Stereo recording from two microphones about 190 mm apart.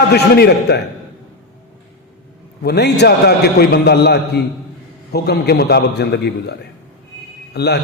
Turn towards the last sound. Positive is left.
turn(degrees=60)  # may be behind; listen again after turning